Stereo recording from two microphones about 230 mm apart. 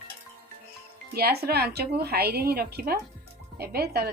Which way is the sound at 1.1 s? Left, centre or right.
Right.